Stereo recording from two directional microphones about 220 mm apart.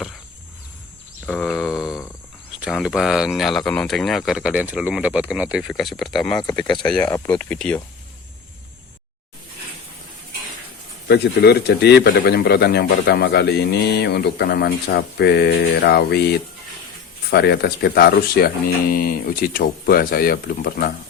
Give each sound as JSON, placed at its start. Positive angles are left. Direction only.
{"t": 1.3, "sound": "a sound", "side_deg": 0}
{"t": 2.6, "sound": "speech", "side_deg": 0}
{"t": 11.1, "sound": "a man's voice", "side_deg": 50}